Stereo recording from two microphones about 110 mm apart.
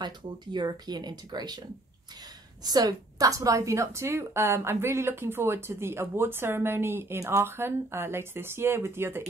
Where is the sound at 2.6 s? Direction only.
35° right (ahead or behind).